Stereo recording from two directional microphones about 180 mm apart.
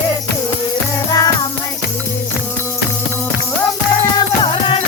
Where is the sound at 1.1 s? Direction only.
20° left (ahead or behind).